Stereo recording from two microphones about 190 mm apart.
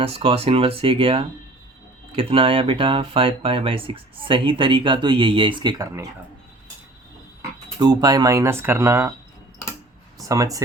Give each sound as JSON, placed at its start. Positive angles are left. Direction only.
{"t": 0.0, "sound": "speech", "side_deg": -30}
{"t": 7.8, "sound": "speech", "side_deg": -20}
{"t": 10.2, "sound": "speech", "side_deg": -15}